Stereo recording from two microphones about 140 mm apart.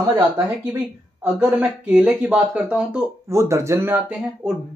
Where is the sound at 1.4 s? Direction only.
10° right (ahead or behind).